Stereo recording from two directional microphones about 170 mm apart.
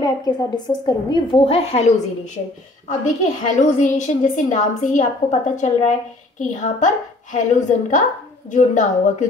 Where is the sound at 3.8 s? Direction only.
45° left (ahead or behind).